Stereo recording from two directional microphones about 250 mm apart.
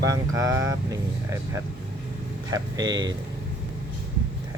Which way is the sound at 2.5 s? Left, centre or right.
Centre.